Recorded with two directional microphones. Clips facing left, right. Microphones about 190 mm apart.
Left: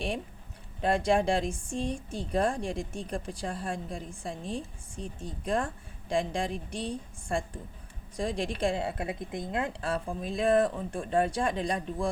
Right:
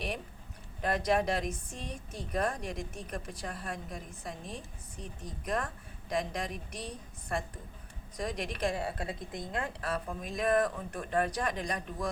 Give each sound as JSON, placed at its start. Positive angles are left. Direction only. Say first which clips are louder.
{"t": 0.8, "sound": "speech", "louder": "left 4 dB", "side_deg": 30}